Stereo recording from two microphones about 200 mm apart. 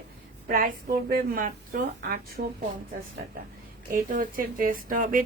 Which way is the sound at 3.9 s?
45° right (ahead or behind).